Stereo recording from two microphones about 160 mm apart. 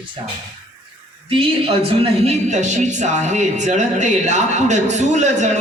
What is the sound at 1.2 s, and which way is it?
Speech, 35° right (ahead or behind).